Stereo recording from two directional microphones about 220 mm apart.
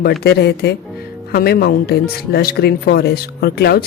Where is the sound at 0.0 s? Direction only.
45° left (ahead or behind).